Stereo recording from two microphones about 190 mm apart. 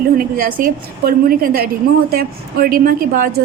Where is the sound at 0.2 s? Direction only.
50° right (ahead or behind).